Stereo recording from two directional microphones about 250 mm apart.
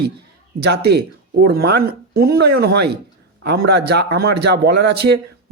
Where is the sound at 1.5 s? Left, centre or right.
Right.